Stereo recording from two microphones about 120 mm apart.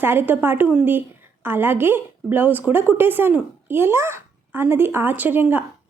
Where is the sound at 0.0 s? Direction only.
15° right (ahead or behind).